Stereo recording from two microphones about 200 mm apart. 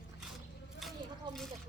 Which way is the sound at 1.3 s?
20° right (ahead or behind).